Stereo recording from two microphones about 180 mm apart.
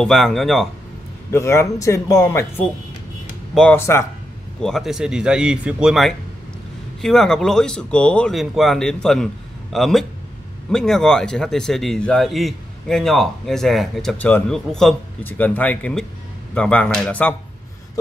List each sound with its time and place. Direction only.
0.0 s a man's voice: centre (ahead or behind)
1.3 s a man's voice: 15° left (ahead or behind)